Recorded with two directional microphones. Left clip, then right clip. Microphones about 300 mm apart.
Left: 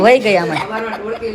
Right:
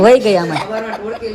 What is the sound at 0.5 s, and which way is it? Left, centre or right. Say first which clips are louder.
Speech: even; right.